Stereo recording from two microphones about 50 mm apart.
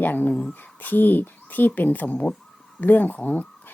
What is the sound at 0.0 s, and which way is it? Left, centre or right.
Speech, left.